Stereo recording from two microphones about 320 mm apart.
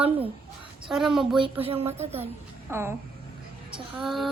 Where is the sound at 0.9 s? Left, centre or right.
Centre.